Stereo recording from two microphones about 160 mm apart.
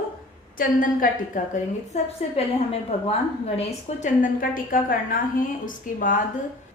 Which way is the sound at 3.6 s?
55° left (ahead or behind).